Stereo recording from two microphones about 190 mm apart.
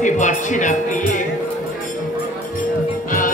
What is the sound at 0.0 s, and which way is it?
Speech, 40° left (ahead or behind).